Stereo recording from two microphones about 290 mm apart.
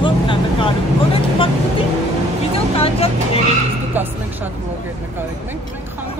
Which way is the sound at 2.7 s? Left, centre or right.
Centre.